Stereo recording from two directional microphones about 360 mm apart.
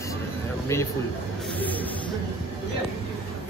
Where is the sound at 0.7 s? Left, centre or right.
Centre.